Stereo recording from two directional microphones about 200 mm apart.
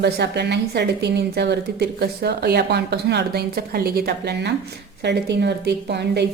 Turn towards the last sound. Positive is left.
turn(degrees=-55)  # may be behind; listen again after turning